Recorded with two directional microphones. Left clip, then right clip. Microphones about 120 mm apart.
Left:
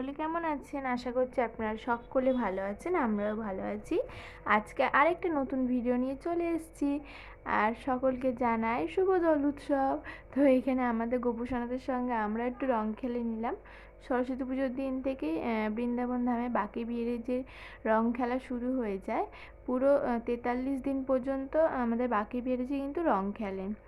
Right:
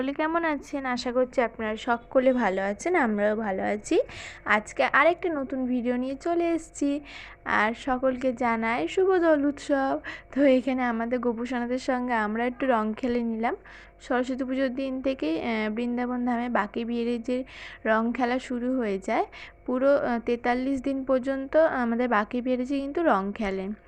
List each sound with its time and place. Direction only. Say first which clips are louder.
0.0 s a woman's voice: right 7 dB; 30° right (ahead or behind)
1.1 s a woman's voice: right 7 dB; 30° right (ahead or behind)
2.1 s a woman's voice: right 8 dB; 30° right (ahead or behind)
4.4 s a woman's voice: right 4 dB; 15° right (ahead or behind)
5.7 s a woman's voice: right 4 dB; 20° right (ahead or behind); by 13.6 s 35° right (ahead or behind)
14.1 s a woman's voice: right 5 dB; 20° right (ahead or behind)